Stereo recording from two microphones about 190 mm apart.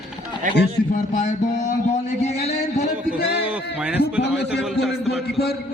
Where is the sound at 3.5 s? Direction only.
5° right (ahead or behind).